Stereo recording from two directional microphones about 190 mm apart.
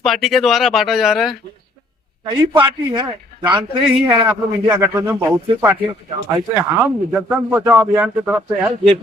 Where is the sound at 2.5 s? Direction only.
25° right (ahead or behind).